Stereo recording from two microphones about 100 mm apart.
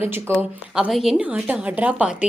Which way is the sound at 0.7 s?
5° right (ahead or behind).